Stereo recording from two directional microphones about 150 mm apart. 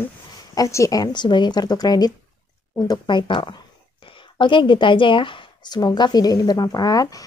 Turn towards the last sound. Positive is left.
turn(degrees=25)  # may be behind; listen again after turning